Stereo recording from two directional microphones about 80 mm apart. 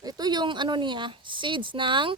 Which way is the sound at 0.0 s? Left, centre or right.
Right.